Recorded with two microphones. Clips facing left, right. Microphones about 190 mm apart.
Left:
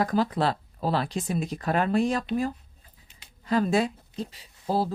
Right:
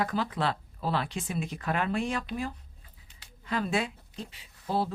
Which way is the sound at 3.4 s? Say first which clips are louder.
Left 6 dB; 40° left (ahead or behind).